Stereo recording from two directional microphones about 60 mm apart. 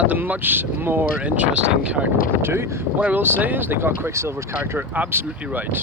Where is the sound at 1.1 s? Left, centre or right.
Right.